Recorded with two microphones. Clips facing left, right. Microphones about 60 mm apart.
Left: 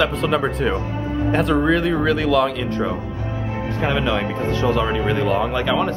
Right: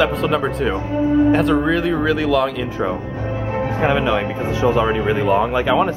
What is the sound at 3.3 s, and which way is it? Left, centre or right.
Music, right.